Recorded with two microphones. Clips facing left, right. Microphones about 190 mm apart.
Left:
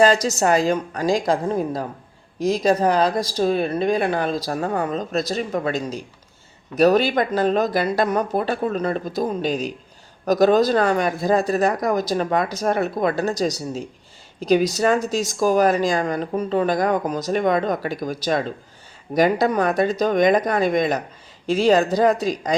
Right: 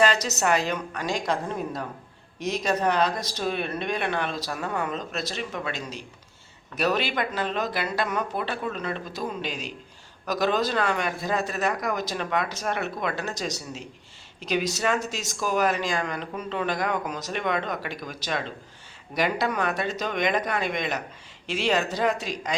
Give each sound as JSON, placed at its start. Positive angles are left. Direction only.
{"t": 0.0, "sound": "a woman's voice", "side_deg": 35}